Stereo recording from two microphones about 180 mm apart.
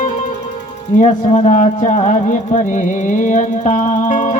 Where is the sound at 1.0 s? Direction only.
45° left (ahead or behind).